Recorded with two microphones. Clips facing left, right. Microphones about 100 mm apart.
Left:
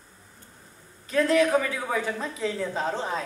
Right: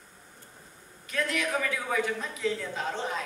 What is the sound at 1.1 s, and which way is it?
Speech, 35° left (ahead or behind).